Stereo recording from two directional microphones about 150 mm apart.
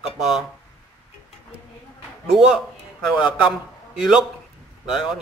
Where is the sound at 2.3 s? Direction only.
5° right (ahead or behind).